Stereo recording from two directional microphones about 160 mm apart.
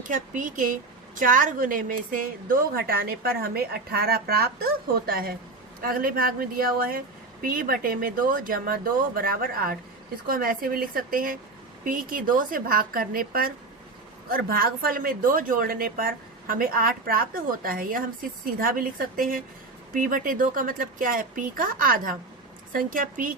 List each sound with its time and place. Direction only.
0.0 s a woman's voice: 55° right (ahead or behind)